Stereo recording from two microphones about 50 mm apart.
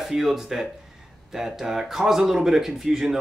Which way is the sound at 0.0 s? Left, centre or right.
Centre.